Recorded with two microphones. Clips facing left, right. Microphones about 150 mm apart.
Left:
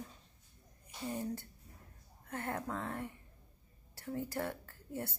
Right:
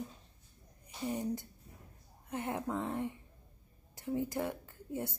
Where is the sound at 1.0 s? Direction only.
15° right (ahead or behind).